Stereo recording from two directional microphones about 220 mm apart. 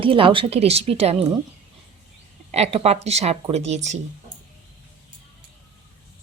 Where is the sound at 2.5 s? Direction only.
30° right (ahead or behind).